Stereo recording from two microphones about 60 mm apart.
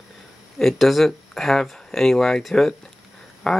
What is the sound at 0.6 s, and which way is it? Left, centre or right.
Speech, centre.